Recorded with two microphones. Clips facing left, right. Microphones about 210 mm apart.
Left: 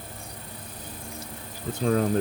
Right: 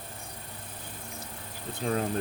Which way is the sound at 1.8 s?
45° left (ahead or behind).